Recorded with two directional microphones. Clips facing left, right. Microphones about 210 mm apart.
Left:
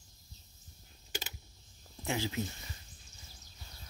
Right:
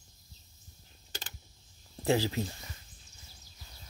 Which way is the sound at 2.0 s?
35° right (ahead or behind).